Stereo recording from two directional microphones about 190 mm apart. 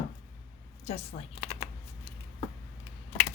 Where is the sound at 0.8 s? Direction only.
35° left (ahead or behind).